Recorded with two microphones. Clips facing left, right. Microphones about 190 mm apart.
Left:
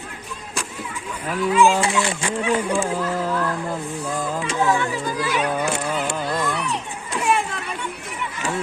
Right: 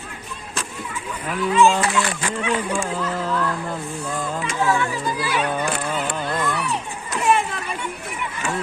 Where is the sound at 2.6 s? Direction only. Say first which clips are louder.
Left 2 dB; 30° left (ahead or behind).